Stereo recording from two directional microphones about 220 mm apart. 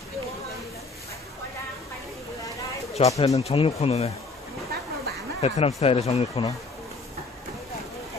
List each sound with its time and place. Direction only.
3.0 s speech: 30° left (ahead or behind)
5.4 s speech: 30° left (ahead or behind)